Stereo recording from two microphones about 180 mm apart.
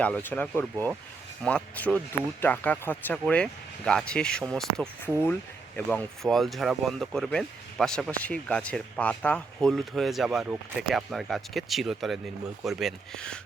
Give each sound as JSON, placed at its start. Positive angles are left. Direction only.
{"t": 0.0, "sound": "speech", "side_deg": 10}